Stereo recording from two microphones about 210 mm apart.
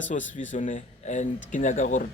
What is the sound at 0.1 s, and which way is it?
A man's voice, 35° left (ahead or behind).